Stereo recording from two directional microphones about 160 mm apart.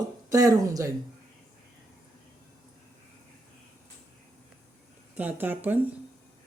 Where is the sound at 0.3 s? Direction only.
20° right (ahead or behind).